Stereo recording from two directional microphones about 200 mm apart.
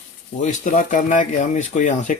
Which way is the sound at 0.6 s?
40° left (ahead or behind).